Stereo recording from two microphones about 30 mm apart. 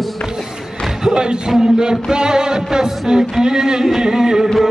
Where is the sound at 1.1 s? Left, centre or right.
Right.